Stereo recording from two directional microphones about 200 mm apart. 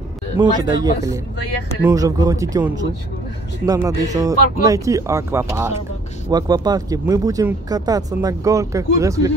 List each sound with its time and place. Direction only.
0.6 s speech: 20° right (ahead or behind)